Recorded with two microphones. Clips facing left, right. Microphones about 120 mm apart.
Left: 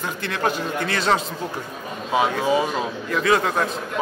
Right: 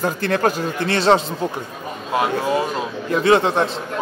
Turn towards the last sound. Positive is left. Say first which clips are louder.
# right 4 dB
turn(degrees=-30)  # may be behind; listen again after turning